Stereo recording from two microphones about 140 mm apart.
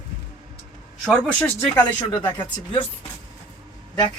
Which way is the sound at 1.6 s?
25° left (ahead or behind).